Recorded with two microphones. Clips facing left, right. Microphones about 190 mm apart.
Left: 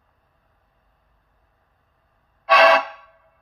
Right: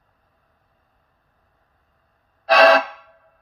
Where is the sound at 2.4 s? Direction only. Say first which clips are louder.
Right 2 dB; 35° right (ahead or behind).